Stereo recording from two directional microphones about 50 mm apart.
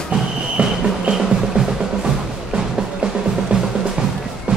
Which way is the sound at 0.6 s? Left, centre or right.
Right.